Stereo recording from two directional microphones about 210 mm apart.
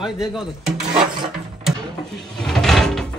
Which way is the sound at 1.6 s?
Centre (ahead or behind).